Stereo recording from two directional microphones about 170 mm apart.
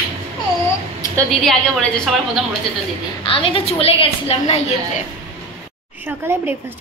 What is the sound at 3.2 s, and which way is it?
A woman's voice, 30° left (ahead or behind).